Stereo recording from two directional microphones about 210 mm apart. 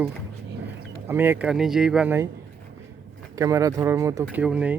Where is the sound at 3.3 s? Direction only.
15° right (ahead or behind).